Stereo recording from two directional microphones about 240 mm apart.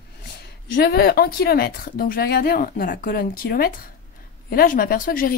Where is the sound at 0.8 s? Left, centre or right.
Left.